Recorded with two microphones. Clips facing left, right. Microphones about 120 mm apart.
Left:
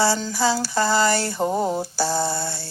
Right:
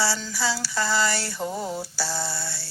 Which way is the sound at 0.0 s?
50° left (ahead or behind).